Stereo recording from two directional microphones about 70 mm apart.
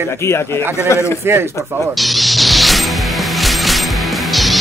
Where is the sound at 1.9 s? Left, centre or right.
Centre.